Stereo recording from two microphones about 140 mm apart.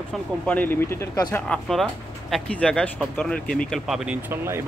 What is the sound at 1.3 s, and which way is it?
Speech, 5° left (ahead or behind).